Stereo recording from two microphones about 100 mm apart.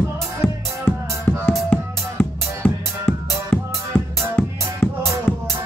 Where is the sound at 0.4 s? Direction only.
25° left (ahead or behind).